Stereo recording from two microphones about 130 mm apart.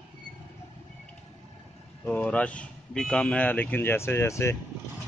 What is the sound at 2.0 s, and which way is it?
Speech, 10° left (ahead or behind).